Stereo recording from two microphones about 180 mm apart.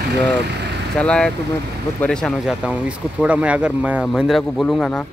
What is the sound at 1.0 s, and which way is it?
Speech, 5° left (ahead or behind).